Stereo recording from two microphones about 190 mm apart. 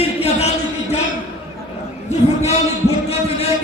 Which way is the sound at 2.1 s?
35° left (ahead or behind).